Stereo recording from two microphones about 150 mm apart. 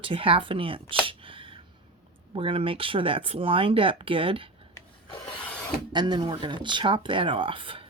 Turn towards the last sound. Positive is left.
turn(degrees=-35)  # may be behind; listen again after turning